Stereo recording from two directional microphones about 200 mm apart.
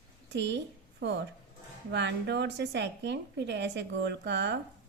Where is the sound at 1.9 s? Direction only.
60° right (ahead or behind).